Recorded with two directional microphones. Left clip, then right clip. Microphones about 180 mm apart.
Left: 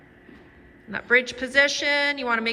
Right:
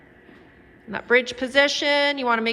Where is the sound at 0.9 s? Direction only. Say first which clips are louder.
Right 1 dB; 10° right (ahead or behind).